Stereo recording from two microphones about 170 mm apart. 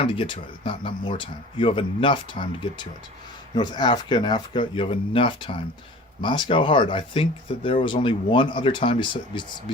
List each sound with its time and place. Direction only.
0.0 s speech: 30° left (ahead or behind)